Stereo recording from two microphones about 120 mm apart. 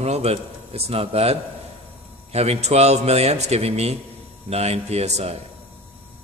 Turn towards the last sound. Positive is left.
turn(degrees=-65)  # may be behind; listen again after turning